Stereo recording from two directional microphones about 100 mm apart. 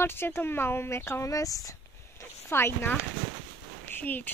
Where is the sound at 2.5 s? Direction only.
25° left (ahead or behind).